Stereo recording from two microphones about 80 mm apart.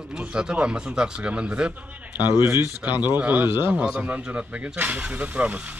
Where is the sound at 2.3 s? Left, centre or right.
Right.